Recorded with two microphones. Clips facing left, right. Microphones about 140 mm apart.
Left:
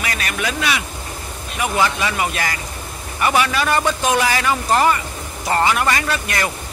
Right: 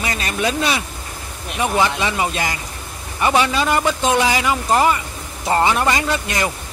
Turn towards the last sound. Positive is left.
turn(degrees=-20)  # may be behind; listen again after turning